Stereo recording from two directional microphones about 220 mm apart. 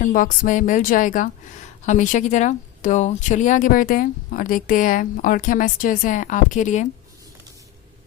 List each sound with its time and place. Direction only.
0.0 s speech: 40° left (ahead or behind)